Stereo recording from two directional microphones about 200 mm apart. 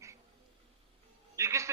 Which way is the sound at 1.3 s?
15° right (ahead or behind).